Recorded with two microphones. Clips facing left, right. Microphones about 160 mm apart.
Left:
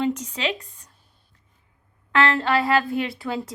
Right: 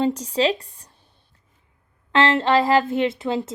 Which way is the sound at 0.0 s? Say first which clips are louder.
Right 5 dB; 30° right (ahead or behind).